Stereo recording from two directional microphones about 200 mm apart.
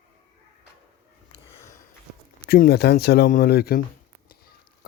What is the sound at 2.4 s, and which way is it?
Speech, 50° left (ahead or behind).